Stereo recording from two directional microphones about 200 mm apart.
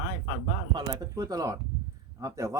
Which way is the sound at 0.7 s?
20° right (ahead or behind).